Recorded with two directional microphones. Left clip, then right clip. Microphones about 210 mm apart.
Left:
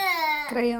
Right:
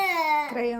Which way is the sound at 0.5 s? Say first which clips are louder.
Left 2 dB; 30° left (ahead or behind).